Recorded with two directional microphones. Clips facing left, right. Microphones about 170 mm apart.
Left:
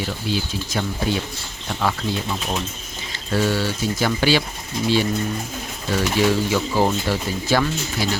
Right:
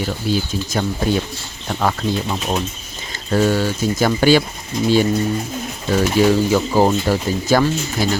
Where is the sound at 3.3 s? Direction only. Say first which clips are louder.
Right 4 dB; 45° right (ahead or behind).